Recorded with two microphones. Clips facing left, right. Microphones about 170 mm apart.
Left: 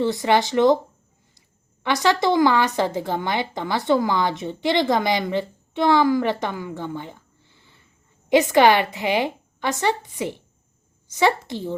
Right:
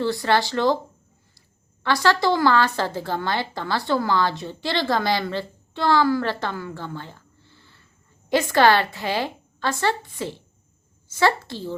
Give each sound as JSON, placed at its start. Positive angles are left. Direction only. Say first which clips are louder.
{"t": 0.0, "sound": "a woman's voice", "louder": "left 2 dB", "side_deg": 20}